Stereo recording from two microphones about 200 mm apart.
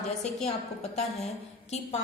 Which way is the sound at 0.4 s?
30° left (ahead or behind).